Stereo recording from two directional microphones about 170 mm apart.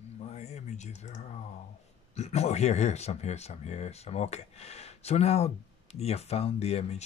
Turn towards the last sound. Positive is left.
turn(degrees=35)  # may be behind; listen again after turning